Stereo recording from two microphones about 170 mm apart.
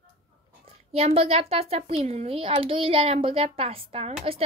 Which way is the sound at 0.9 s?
35° right (ahead or behind).